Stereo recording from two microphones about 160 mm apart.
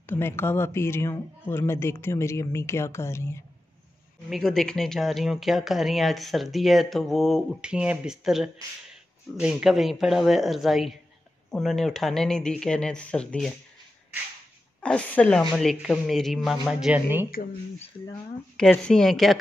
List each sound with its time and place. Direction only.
0.0 s speech: 15° left (ahead or behind)
4.3 s speech: centre (ahead or behind)
14.8 s speech: 5° left (ahead or behind); by 17.3 s 10° right (ahead or behind)
18.6 s speech: 5° left (ahead or behind)